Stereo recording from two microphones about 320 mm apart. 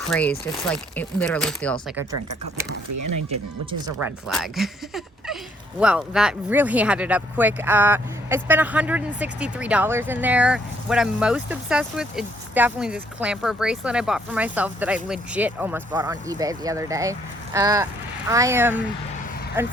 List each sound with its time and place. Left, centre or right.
0.1 s speech: centre
2.9 s speech: right
4.3 s speech: centre